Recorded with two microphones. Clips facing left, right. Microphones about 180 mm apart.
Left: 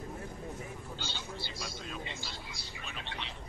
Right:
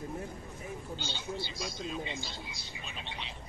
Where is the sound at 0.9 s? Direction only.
20° right (ahead or behind).